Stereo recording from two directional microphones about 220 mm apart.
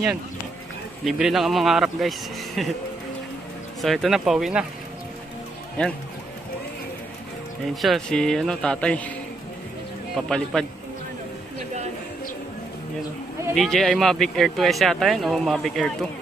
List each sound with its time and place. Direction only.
1.0 s speech: centre (ahead or behind)
3.8 s speech: centre (ahead or behind)
5.8 s speech: 5° left (ahead or behind)
7.7 s speech: centre (ahead or behind)
10.1 s speech: centre (ahead or behind)
13.6 s speech: centre (ahead or behind)